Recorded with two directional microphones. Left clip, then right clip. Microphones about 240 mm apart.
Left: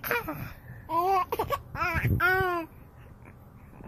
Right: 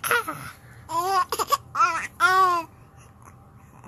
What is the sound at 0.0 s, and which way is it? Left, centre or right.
Laughter, centre.